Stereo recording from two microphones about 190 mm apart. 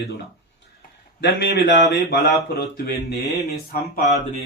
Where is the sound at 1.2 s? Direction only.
65° left (ahead or behind).